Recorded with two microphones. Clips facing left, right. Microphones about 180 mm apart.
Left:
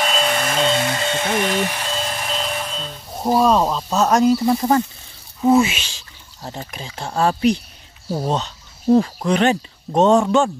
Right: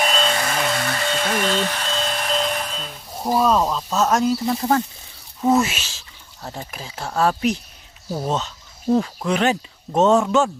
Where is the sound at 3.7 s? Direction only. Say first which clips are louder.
Left 3 dB; centre (ahead or behind).